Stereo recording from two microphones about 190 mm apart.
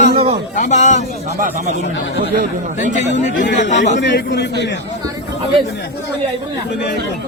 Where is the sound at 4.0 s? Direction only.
65° left (ahead or behind).